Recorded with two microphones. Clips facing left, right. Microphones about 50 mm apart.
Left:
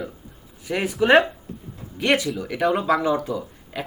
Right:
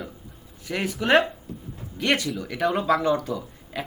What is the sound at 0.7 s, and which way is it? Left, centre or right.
Speech, centre.